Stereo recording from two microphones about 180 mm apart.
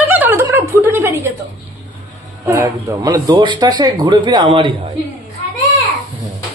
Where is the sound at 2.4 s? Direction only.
15° right (ahead or behind).